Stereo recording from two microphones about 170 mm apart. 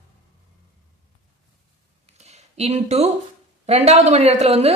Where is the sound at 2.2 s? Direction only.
40° right (ahead or behind).